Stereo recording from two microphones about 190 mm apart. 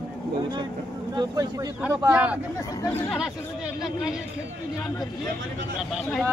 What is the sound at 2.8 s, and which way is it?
Speech, 10° left (ahead or behind).